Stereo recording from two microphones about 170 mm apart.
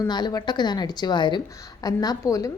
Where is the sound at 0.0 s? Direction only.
25° left (ahead or behind).